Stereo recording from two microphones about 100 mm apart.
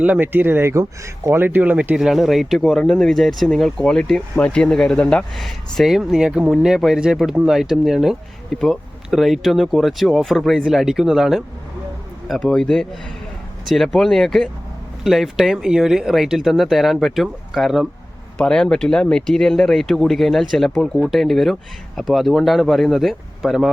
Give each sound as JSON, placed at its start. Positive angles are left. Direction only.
{"t": 0.0, "sound": "speech", "side_deg": -15}
{"t": 2.0, "sound": "speech", "side_deg": 0}
{"t": 12.3, "sound": "a man's voice", "side_deg": 10}